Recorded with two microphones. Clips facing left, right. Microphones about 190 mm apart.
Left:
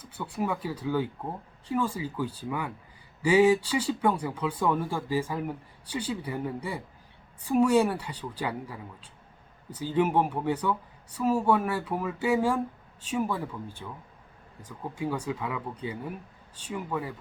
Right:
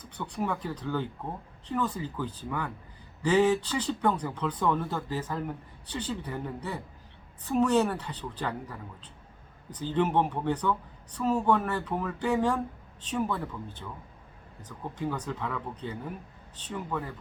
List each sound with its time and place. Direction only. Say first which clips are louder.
0.0 s speech: left 1 dB; 5° left (ahead or behind)